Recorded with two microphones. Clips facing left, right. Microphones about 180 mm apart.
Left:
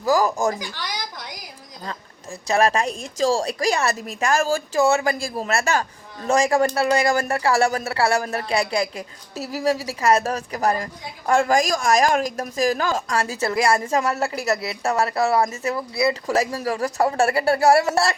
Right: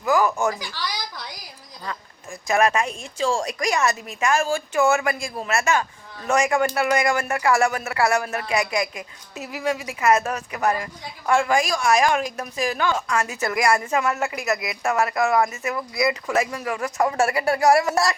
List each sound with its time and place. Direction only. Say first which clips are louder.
0.0 s speech: left 1 dB; 35° left (ahead or behind)
0.8 s a sound: even; 20° left (ahead or behind)
2.5 s speech: left 1 dB; 35° left (ahead or behind)